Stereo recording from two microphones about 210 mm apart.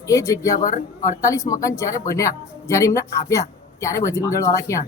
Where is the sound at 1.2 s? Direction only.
15° left (ahead or behind).